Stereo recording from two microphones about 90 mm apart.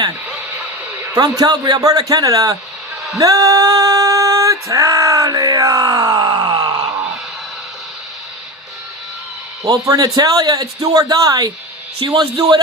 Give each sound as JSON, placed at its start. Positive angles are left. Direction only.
{"t": 1.4, "sound": "a man's voice", "side_deg": -45}
{"t": 3.2, "sound": "a sound", "side_deg": -40}
{"t": 9.6, "sound": "a man's voice", "side_deg": -40}
{"t": 11.9, "sound": "a man's voice", "side_deg": -65}